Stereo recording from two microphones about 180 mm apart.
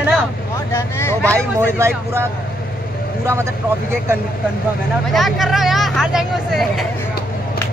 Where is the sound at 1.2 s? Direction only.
15° right (ahead or behind).